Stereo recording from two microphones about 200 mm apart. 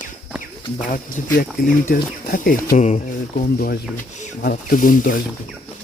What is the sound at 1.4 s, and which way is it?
Speech, 45° left (ahead or behind).